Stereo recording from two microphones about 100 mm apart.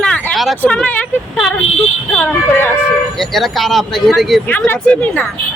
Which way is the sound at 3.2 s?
Centre (ahead or behind).